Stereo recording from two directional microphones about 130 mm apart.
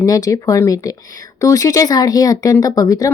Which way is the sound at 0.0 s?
25° left (ahead or behind).